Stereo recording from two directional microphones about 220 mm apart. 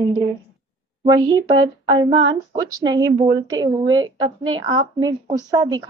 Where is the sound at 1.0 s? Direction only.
20° right (ahead or behind).